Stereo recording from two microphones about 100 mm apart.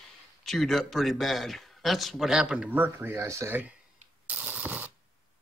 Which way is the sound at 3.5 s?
15° right (ahead or behind).